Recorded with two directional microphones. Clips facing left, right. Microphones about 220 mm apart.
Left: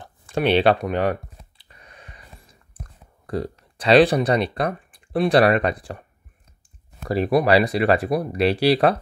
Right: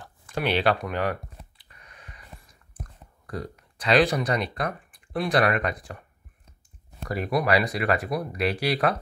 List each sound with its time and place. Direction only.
0.0 s speech: 25° left (ahead or behind)
1.7 s a sound: 30° left (ahead or behind)
3.3 s speech: 30° left (ahead or behind)
7.1 s speech: 30° left (ahead or behind)